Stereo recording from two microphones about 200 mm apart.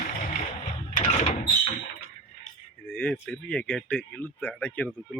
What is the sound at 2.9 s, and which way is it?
Speech, 5° left (ahead or behind).